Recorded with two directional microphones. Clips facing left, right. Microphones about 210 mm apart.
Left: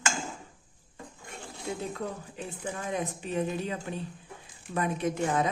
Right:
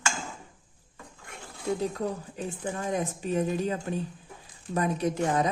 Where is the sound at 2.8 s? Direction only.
40° right (ahead or behind).